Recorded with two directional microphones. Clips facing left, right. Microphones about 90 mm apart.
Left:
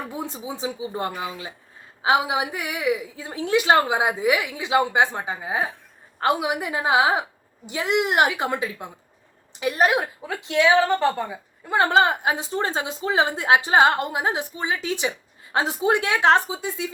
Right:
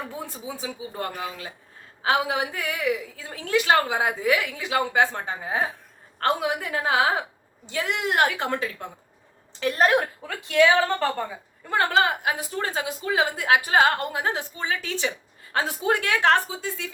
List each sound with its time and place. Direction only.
0.1 s a woman's voice: 20° left (ahead or behind)
10.2 s a woman's voice: 20° left (ahead or behind)